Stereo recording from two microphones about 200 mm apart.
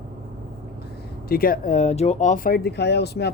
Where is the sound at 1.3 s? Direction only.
45° left (ahead or behind).